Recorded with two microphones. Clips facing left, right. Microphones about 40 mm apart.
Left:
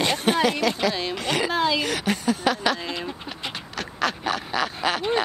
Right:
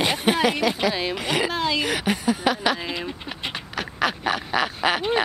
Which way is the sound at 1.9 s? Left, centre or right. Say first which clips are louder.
Right 1 dB; centre.